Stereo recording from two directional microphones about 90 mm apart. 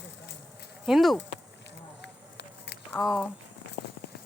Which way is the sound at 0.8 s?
Centre (ahead or behind).